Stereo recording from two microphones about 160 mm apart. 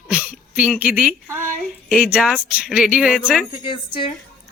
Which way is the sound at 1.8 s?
5° left (ahead or behind).